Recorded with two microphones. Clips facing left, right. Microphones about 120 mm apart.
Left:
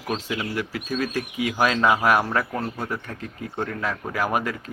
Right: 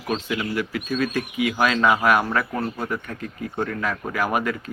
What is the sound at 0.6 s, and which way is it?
Speech, 35° left (ahead or behind).